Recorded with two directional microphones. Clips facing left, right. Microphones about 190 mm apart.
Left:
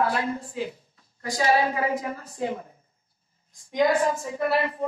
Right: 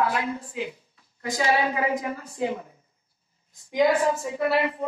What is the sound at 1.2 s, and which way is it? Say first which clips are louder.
A woman's voice: left 1 dB; 20° right (ahead or behind).